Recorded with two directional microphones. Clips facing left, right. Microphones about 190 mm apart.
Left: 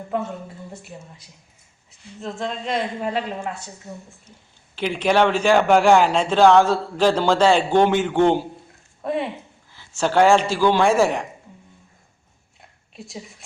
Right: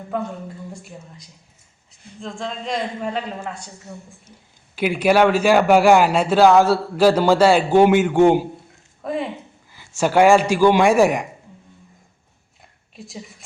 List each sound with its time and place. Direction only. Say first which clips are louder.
0.7 s a woman's voice: right 1 dB; 5° left (ahead or behind)
4.7 s a man's voice: right 3 dB; 10° right (ahead or behind)
9.0 s a sound: left 1 dB; centre (ahead or behind)
9.7 s a man's voice: right 2 dB; 10° right (ahead or behind)